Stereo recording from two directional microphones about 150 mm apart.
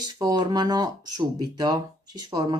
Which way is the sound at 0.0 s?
25° right (ahead or behind).